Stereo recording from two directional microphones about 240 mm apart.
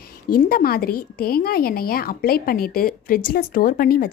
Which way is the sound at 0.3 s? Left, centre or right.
Left.